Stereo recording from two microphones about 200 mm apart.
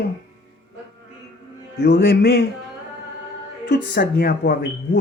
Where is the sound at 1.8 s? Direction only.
55° left (ahead or behind).